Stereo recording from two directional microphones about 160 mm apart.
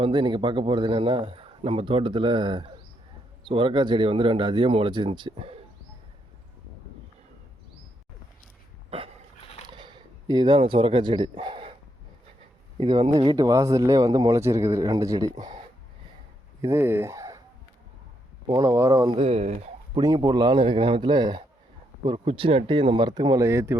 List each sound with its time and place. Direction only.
0.0 s speech: 30° right (ahead or behind)
8.9 s dog: 35° right (ahead or behind)
9.6 s speech: 30° right (ahead or behind)
12.7 s speech: 30° right (ahead or behind)
13.3 s speech: 20° right (ahead or behind)
18.4 s speech: 20° right (ahead or behind)
19.1 s speech: 40° right (ahead or behind)
20.0 s speech: 25° right (ahead or behind)